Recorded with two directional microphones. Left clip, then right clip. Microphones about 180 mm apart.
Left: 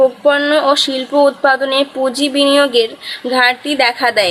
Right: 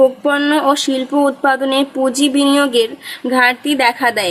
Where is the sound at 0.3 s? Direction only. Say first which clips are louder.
Left 2 dB; 30° right (ahead or behind).